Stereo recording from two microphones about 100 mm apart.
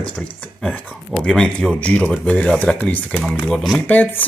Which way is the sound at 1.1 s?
5° left (ahead or behind).